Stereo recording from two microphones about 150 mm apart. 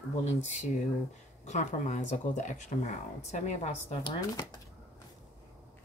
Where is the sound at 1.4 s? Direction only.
50° left (ahead or behind).